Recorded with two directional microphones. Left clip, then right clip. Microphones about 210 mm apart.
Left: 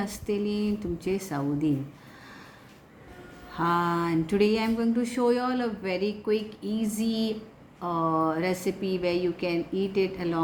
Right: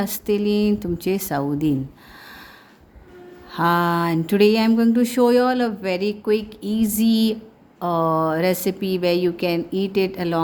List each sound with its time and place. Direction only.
0.0 s speech: 55° right (ahead or behind)
3.5 s a sound: 55° right (ahead or behind)
7.8 s speech: 55° right (ahead or behind)